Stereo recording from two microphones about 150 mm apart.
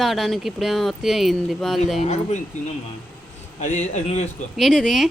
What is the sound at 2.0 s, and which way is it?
Speech, 50° left (ahead or behind).